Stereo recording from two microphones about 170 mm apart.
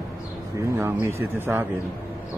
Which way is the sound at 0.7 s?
15° right (ahead or behind).